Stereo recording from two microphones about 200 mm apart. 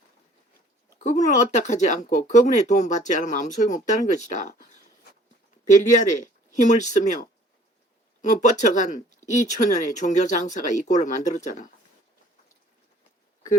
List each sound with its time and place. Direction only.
0.9 s speech: 35° left (ahead or behind)
6.0 s speech: 40° left (ahead or behind)
8.2 s speech: 40° left (ahead or behind)